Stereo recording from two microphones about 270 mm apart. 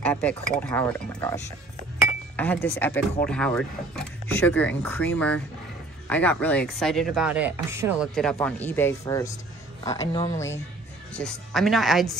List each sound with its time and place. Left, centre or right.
0.0 s speech: centre
8.1 s speech: centre
11.1 s speech: centre